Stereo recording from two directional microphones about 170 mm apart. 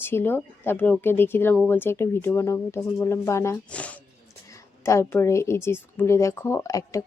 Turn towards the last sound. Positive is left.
turn(degrees=20)  # may be behind; listen again after turning